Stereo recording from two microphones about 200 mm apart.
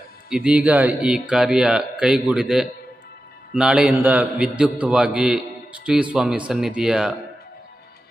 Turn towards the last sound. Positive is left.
turn(degrees=-5)  # may be behind; listen again after turning